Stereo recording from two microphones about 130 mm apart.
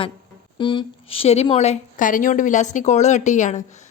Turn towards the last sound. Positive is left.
turn(degrees=70)  # may be behind; listen again after turning